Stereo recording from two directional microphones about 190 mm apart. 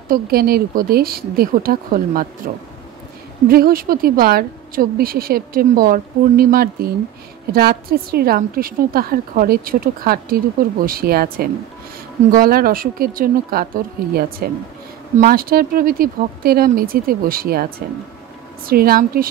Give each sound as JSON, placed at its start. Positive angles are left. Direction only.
{"t": 0.1, "sound": "a woman's voice", "side_deg": -50}